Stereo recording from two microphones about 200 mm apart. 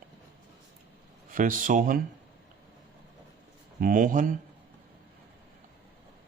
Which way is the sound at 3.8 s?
45° right (ahead or behind).